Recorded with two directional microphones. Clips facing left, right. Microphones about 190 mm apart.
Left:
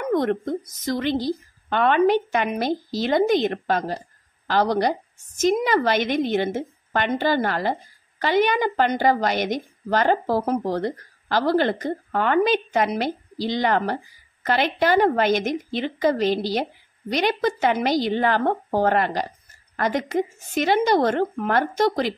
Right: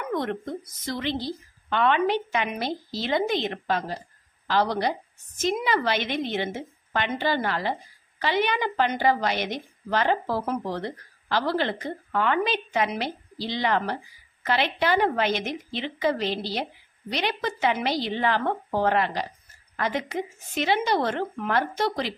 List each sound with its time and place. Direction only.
0.1 s a woman's voice: 45° left (ahead or behind)